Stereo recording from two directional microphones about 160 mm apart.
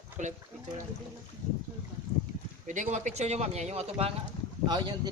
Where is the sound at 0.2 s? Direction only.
50° right (ahead or behind).